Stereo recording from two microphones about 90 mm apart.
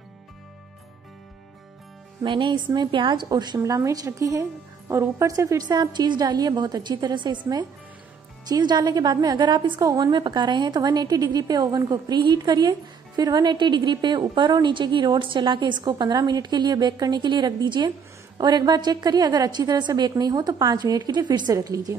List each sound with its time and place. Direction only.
2.2 s speech: 65° right (ahead or behind)
3.3 s a woman's voice: 50° right (ahead or behind)
3.5 s a woman's voice: 35° right (ahead or behind)
8.5 s a woman's voice: 50° right (ahead or behind)
10.1 s a woman's voice: 55° right (ahead or behind)
21.5 s a woman's voice: 40° right (ahead or behind)